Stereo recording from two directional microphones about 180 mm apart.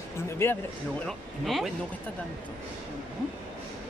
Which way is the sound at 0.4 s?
15° left (ahead or behind).